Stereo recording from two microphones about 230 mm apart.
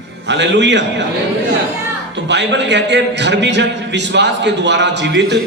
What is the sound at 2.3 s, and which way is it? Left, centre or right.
A man's voice, right.